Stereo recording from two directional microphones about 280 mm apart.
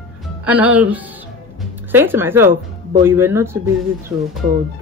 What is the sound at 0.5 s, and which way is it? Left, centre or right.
Speech, centre.